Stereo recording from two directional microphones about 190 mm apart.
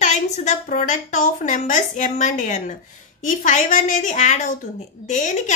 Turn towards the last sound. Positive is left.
turn(degrees=40)  # may be behind; listen again after turning